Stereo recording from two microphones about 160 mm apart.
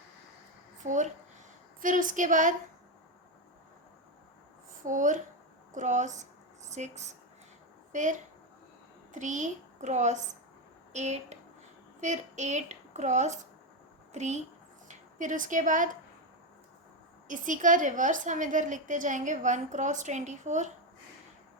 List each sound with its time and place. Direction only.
0.9 s a woman's voice: 50° right (ahead or behind)
4.9 s a woman's voice: 55° right (ahead or behind)
17.2 s a woman's voice: 55° right (ahead or behind)